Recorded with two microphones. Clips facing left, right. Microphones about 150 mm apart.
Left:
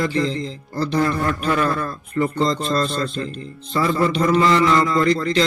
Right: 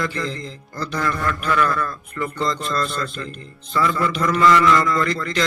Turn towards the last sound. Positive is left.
turn(degrees=25)  # may be behind; listen again after turning